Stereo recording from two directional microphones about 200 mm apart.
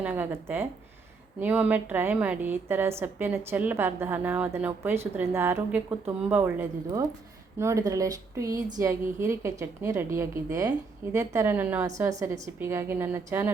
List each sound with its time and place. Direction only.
0.0 s a woman's voice: 10° right (ahead or behind)